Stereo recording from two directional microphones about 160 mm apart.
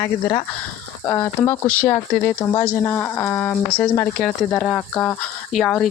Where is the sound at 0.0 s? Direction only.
25° left (ahead or behind).